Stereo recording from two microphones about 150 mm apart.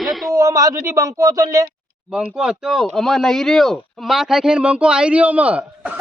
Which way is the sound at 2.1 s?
5° right (ahead or behind).